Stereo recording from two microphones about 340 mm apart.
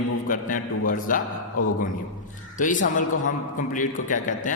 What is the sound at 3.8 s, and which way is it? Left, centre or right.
Speech, left.